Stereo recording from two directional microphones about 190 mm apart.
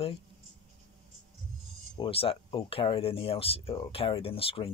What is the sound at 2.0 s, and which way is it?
Speech, 30° left (ahead or behind).